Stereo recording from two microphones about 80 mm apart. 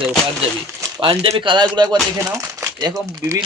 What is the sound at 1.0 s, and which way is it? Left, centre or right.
Speech, right.